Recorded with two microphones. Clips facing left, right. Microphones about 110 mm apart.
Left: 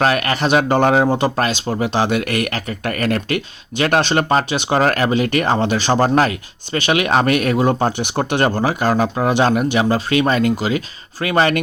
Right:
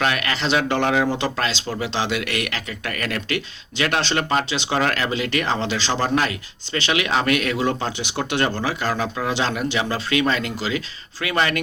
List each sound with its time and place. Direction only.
0.0 s speech: 40° left (ahead or behind)